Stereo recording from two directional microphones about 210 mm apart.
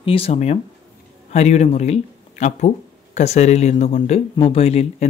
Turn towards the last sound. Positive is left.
turn(degrees=30)  # may be behind; listen again after turning